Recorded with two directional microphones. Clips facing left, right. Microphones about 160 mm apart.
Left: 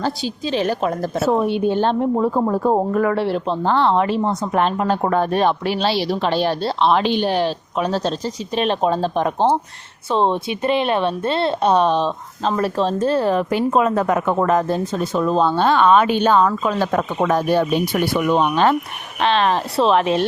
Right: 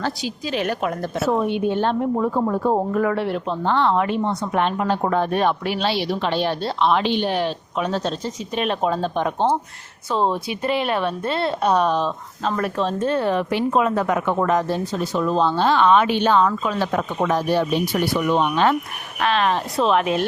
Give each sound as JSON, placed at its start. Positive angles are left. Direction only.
{"t": 0.0, "sound": "a woman's voice", "side_deg": 30}
{"t": 2.3, "sound": "a woman's voice", "side_deg": 40}
{"t": 5.3, "sound": "a woman's voice", "side_deg": 30}
{"t": 7.0, "sound": "a woman's voice", "side_deg": 45}
{"t": 10.1, "sound": "a woman's voice", "side_deg": 25}